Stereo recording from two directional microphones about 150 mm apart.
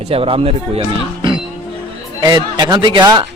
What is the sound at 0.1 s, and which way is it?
Speech, 40° right (ahead or behind).